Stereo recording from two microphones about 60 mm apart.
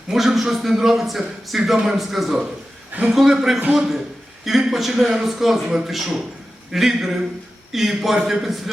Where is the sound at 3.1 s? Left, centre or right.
Centre.